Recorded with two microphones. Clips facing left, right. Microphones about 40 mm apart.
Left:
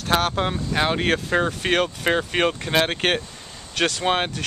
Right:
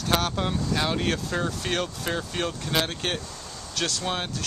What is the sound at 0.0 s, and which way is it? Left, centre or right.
Speech, left.